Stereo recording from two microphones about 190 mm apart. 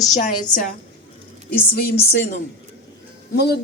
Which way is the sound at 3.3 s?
60° left (ahead or behind).